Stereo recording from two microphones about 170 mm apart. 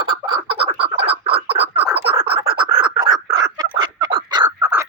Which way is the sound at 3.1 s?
25° right (ahead or behind).